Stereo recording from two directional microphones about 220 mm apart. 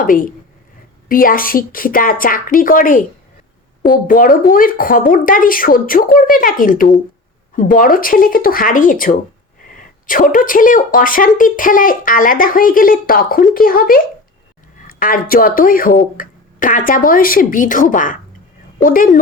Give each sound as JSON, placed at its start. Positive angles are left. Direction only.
{"t": 0.0, "sound": "speech", "side_deg": 40}
{"t": 4.0, "sound": "speech", "side_deg": 40}
{"t": 9.6, "sound": "sneeze", "side_deg": 40}
{"t": 10.3, "sound": "speech", "side_deg": 40}